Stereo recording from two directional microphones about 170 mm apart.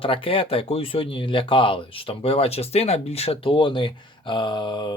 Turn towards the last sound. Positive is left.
turn(degrees=30)  # may be behind; listen again after turning